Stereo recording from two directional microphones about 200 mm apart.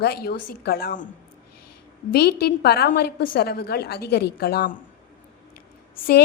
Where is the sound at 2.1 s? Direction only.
50° left (ahead or behind).